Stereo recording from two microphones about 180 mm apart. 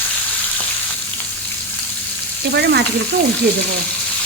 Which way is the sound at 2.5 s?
65° right (ahead or behind).